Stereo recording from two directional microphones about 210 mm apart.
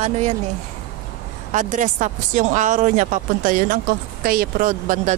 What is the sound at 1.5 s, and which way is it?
Speech, 35° right (ahead or behind).